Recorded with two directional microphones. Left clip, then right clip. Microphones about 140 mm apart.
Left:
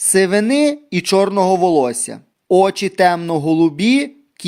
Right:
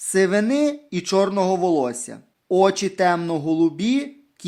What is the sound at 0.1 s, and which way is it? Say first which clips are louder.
Speech: left 4 dB; 35° left (ahead or behind).